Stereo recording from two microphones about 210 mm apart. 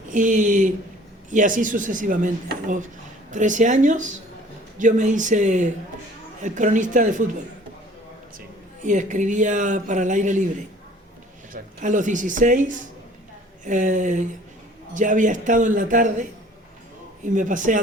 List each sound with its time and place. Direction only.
0.1 s speech: 40° right (ahead or behind)
11.5 s speech: 35° right (ahead or behind)
17.2 s speech: 40° right (ahead or behind)